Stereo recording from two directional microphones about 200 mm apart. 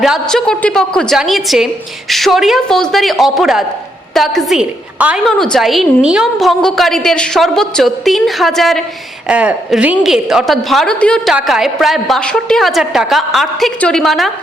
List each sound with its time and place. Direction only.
0.0 s a woman's voice: centre (ahead or behind)